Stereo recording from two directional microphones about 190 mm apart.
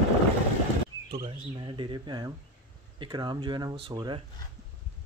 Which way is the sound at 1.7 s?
25° right (ahead or behind).